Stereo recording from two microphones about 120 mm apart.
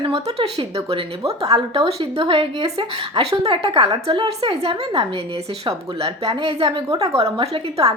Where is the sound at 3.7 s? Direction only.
35° right (ahead or behind).